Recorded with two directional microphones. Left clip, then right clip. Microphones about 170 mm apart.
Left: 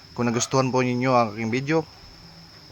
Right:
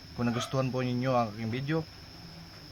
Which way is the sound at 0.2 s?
30° left (ahead or behind).